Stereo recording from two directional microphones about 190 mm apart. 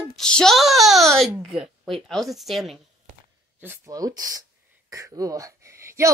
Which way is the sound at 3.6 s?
15° right (ahead or behind).